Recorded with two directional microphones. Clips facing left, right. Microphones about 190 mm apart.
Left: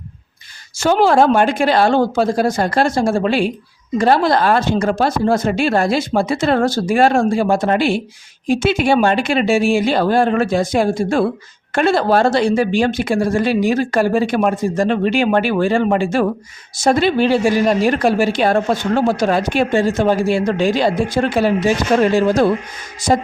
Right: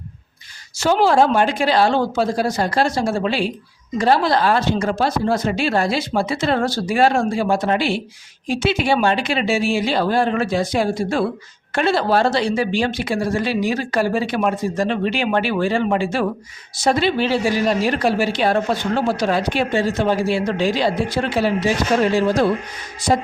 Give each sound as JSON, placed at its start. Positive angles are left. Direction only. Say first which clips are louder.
{"t": 0.8, "sound": "a woman's voice", "louder": "left 2 dB", "side_deg": 50}
{"t": 23.0, "sound": "a woman's voice", "louder": "left 2 dB", "side_deg": 45}